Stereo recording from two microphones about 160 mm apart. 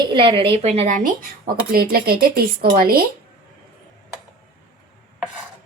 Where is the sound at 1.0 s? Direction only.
60° right (ahead or behind).